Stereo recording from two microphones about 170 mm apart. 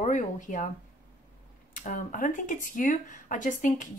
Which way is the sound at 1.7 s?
50° left (ahead or behind).